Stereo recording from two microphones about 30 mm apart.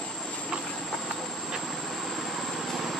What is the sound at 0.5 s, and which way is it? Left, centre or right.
Train, right.